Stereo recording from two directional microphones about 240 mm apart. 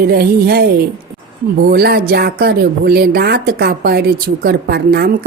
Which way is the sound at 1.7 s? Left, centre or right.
Right.